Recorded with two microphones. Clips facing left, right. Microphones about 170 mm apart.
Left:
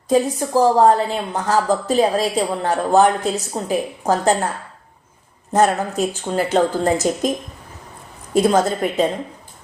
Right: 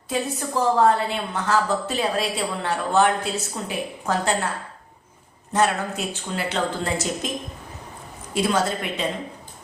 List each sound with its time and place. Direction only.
0.1 s a woman's voice: 35° left (ahead or behind)
5.5 s speech: 40° left (ahead or behind)
8.3 s a woman's voice: 40° left (ahead or behind)